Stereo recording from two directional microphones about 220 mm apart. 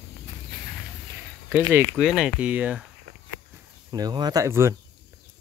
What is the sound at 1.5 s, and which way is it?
Speech, 10° right (ahead or behind).